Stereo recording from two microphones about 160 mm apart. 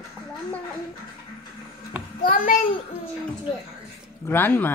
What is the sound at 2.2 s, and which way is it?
Speech, 60° left (ahead or behind).